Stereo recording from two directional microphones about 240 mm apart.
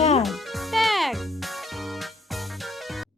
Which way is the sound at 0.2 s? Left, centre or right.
Centre.